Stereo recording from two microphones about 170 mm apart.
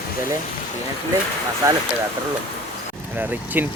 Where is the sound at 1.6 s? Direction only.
20° right (ahead or behind).